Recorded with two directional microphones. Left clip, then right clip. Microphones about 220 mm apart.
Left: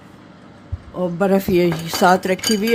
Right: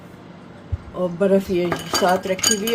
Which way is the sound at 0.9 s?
40° left (ahead or behind).